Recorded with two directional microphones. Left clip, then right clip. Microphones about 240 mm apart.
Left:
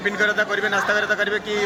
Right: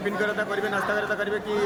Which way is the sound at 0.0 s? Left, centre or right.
Centre.